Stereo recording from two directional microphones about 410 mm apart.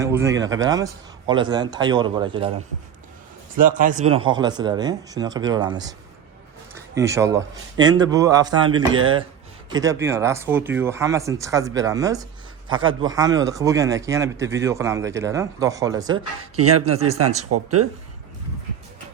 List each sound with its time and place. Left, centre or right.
0.0 s a man's voice: centre
3.6 s a man's voice: centre
6.7 s a man's voice: centre
16.1 s speech: right